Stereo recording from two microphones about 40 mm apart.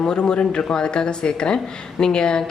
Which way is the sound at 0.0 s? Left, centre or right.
Left.